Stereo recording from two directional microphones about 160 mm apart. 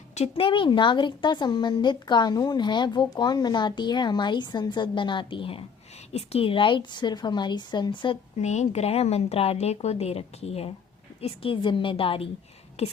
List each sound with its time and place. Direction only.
0.1 s a woman's voice: 40° left (ahead or behind)
8.4 s a woman's voice: 45° left (ahead or behind)